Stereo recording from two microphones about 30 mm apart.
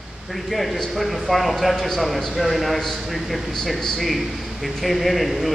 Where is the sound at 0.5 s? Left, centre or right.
Centre.